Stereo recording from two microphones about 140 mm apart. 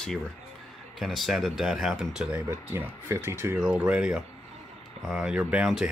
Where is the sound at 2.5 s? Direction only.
15° right (ahead or behind).